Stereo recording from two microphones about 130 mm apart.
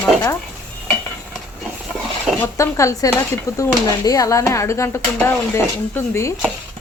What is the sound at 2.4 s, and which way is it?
Speech, 25° left (ahead or behind).